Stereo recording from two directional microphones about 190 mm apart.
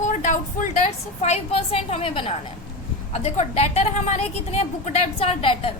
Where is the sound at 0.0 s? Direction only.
40° left (ahead or behind).